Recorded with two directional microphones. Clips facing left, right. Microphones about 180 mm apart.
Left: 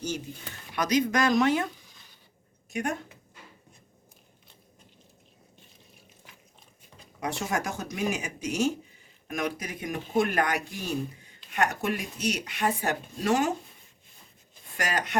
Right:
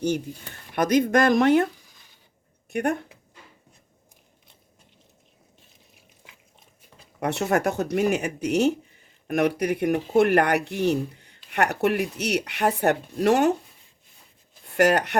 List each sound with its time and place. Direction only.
0.7 s speech: 55° right (ahead or behind)
7.2 s speech: 65° right (ahead or behind)
14.8 s speech: 65° right (ahead or behind)